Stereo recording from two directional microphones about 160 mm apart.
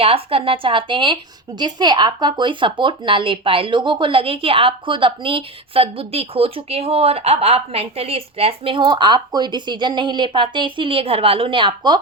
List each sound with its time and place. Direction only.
0.0 s a woman's voice: 35° right (ahead or behind)